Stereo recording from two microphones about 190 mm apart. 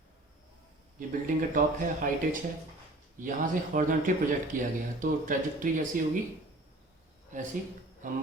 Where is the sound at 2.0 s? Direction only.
50° right (ahead or behind).